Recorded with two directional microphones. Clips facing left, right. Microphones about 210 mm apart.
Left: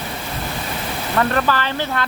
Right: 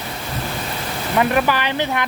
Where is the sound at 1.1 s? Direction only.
15° right (ahead or behind).